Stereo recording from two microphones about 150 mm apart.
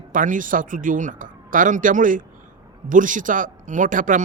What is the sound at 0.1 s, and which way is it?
Speech, 60° right (ahead or behind).